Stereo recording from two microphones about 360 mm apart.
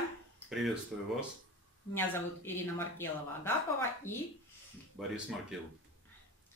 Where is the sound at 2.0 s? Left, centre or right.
Centre.